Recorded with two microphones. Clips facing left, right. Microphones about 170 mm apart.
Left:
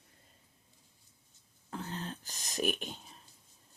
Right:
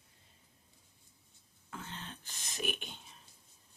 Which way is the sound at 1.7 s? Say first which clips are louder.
Left 6 dB; 35° left (ahead or behind).